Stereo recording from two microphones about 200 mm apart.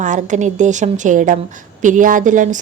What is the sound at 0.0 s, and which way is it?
A woman's voice, 40° right (ahead or behind).